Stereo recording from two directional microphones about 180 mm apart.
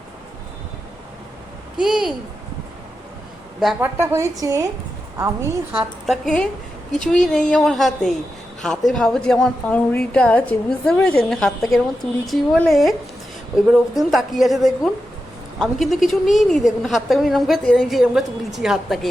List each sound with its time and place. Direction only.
1.8 s a woman's voice: 5° right (ahead or behind)
3.8 s a woman's voice: 15° right (ahead or behind)
6.1 s a woman's voice: 5° left (ahead or behind)